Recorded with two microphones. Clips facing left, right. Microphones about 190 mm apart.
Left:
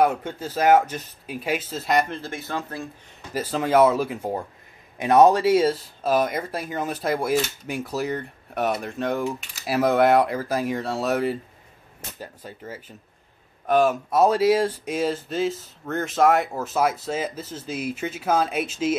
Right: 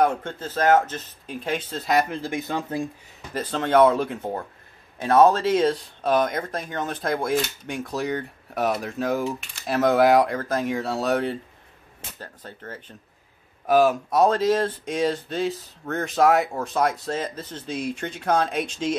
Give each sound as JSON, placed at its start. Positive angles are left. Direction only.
{"t": 0.0, "sound": "speech", "side_deg": 10}
{"t": 2.2, "sound": "speech", "side_deg": -15}
{"t": 3.3, "sound": "speech", "side_deg": 5}